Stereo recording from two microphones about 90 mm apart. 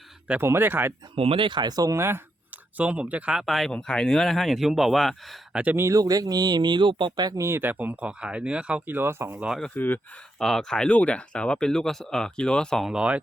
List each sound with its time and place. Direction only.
0.4 s speech: 25° right (ahead or behind)
1.1 s speech: 90° right; by 2.2 s 30° right (ahead or behind)
2.7 s speech: 15° right (ahead or behind)
3.4 s speech: centre (ahead or behind)
3.7 s speech: 10° left (ahead or behind)
5.7 s speech: 30° right (ahead or behind)
6.0 s speech: 45° right (ahead or behind); by 7.3 s 60° right (ahead or behind)
7.3 s speech: 35° right (ahead or behind); by 8.8 s 15° right (ahead or behind)
8.9 s speech: 25° right (ahead or behind)
9.7 s speech: 20° left (ahead or behind)
10.3 s speech: 5° left (ahead or behind)
12.8 s speech: 10° right (ahead or behind)